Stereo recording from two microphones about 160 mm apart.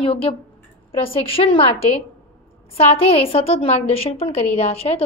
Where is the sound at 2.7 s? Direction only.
40° left (ahead or behind).